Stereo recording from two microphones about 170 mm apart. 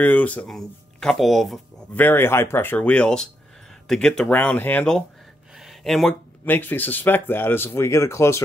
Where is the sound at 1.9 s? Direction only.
15° left (ahead or behind).